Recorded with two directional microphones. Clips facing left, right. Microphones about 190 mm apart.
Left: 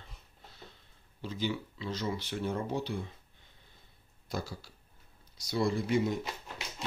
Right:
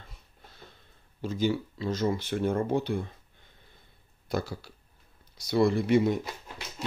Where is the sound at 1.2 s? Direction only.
45° right (ahead or behind).